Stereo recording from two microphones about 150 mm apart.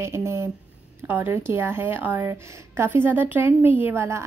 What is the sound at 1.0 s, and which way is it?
A woman's voice, 15° right (ahead or behind).